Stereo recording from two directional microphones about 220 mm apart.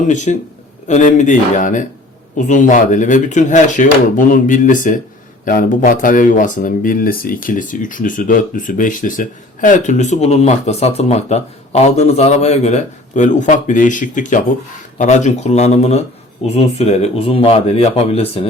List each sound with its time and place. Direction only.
0.1 s speech: 35° left (ahead or behind)